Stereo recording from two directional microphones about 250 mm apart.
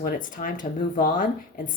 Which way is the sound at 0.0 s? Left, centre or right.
Left.